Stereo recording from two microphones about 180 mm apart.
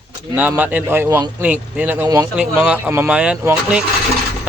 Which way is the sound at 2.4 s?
5° right (ahead or behind).